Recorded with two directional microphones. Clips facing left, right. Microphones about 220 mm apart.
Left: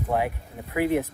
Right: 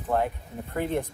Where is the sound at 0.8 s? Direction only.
10° left (ahead or behind).